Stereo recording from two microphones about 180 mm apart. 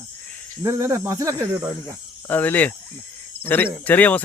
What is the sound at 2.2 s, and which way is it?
Cricket, 10° left (ahead or behind).